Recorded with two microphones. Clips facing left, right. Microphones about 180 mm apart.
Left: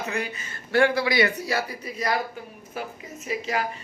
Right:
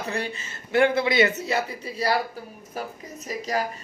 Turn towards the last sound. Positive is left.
turn(degrees=-40)  # may be behind; listen again after turning